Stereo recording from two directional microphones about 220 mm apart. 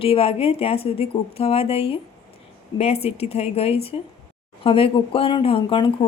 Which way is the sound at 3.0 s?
30° left (ahead or behind).